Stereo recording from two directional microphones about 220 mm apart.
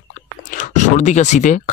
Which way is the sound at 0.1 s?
35° left (ahead or behind).